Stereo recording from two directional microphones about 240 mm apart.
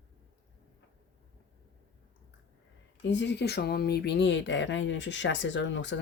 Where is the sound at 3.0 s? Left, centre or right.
Left.